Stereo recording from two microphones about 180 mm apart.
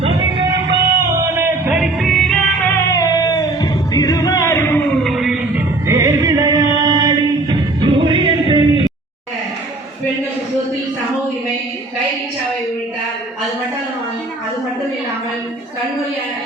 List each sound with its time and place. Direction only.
0.0 s music: 30° right (ahead or behind)
1.4 s music: 5° right (ahead or behind)
5.9 s music: 20° right (ahead or behind)